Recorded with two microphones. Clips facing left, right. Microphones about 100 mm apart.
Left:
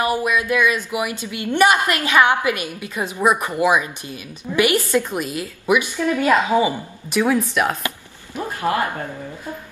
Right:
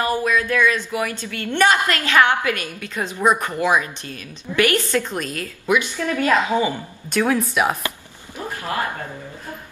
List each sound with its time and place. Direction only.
0.0 s a woman's voice: 15° left (ahead or behind); by 7.7 s centre (ahead or behind)
8.5 s a man's voice: 20° left (ahead or behind)